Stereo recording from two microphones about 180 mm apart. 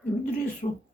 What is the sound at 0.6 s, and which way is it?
Speech, 35° left (ahead or behind).